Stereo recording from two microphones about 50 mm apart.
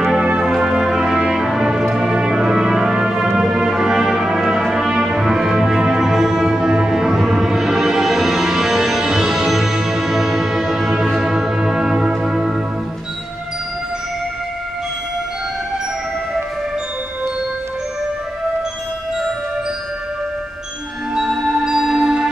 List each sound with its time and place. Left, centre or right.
0.2 s music: centre
3.3 s brass instrument: centre
6.4 s music: centre
21.1 s music: centre